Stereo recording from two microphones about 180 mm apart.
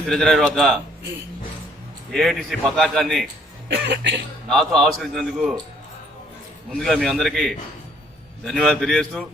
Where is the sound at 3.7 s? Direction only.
85° right.